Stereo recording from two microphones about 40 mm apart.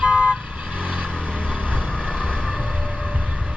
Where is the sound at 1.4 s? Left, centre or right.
Left.